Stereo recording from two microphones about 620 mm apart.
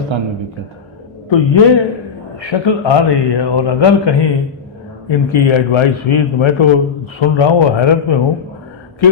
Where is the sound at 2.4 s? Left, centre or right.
Left.